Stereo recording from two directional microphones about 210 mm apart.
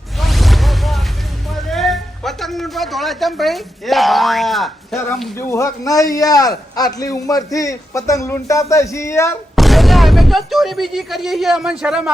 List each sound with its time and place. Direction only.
0.2 s a sound: centre (ahead or behind)
1.6 s a man's voice: centre (ahead or behind)
5.4 s a man's voice: 15° left (ahead or behind)
9.6 s speech: centre (ahead or behind)